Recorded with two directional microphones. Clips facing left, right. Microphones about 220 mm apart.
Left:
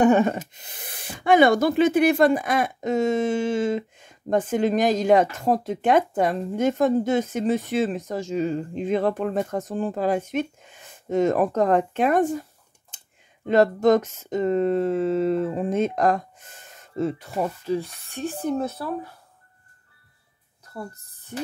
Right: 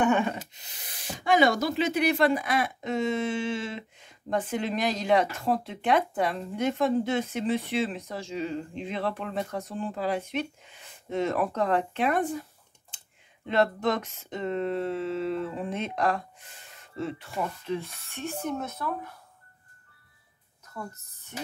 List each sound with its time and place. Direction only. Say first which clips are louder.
0.0 s speech: left 7 dB; 40° left (ahead or behind)
13.5 s speech: left 8 dB; 45° left (ahead or behind)
20.6 s music: left 4 dB; 35° left (ahead or behind)